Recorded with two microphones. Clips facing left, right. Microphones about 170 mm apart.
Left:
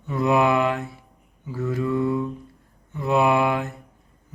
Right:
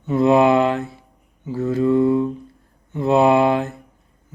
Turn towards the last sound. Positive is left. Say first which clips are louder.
# right 5 dB
turn(degrees=-30)  # may be behind; listen again after turning